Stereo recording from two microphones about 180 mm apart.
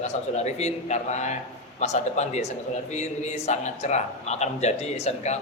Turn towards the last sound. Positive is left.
turn(degrees=35)  # may be behind; listen again after turning